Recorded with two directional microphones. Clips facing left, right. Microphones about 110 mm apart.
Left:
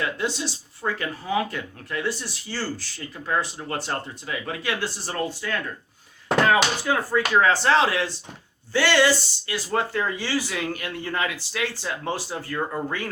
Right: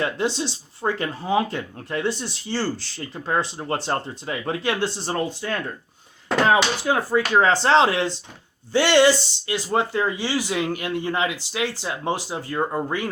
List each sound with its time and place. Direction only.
0.0 s speech: 30° right (ahead or behind)